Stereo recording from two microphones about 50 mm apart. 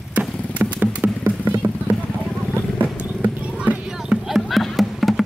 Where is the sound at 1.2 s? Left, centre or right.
Right.